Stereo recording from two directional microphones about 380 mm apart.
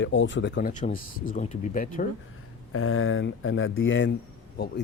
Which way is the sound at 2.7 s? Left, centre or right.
Left.